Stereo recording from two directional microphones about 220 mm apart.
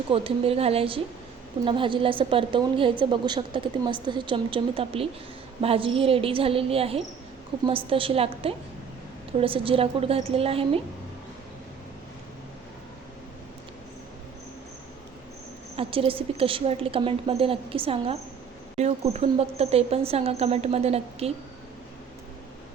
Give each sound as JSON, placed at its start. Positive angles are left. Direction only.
{"t": 0.1, "sound": "speech", "side_deg": -25}
{"t": 15.7, "sound": "speech", "side_deg": -25}